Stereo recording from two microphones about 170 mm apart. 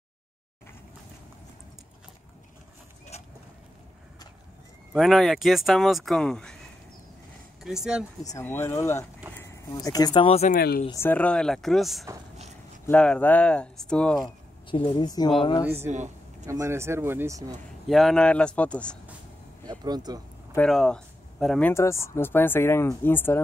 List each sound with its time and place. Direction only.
3.1 s vehicle: 40° left (ahead or behind)
4.9 s speech: centre (ahead or behind)
7.6 s speech: 5° right (ahead or behind)
8.2 s speech: 20° left (ahead or behind); by 10.5 s 35° left (ahead or behind)
10.5 s speech: 65° left (ahead or behind)
10.9 s speech: 15° left (ahead or behind)
14.7 s a woman's voice: 30° left (ahead or behind)
15.9 s a sound: 45° right (ahead or behind)
16.4 s speech: 15° right (ahead or behind)
17.8 s speech: centre (ahead or behind)
19.6 s speech: 25° right (ahead or behind)
20.5 s speech: 5° left (ahead or behind)